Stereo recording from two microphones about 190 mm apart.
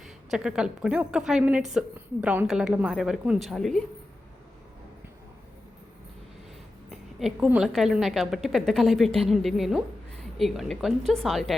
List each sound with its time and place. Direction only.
0.0 s a woman's voice: 5° right (ahead or behind)
6.9 s a woman's voice: centre (ahead or behind)